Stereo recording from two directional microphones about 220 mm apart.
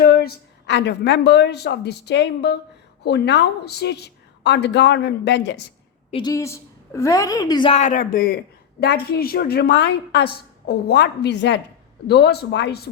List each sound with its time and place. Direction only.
0.0 s a woman's voice: 45° left (ahead or behind)
6.1 s speech: 25° left (ahead or behind)
6.3 s a woman's voice: 15° left (ahead or behind); by 12.9 s 50° left (ahead or behind)